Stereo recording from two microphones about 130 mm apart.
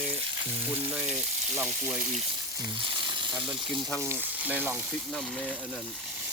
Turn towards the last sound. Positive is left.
turn(degrees=0)  # may be behind; listen again after turning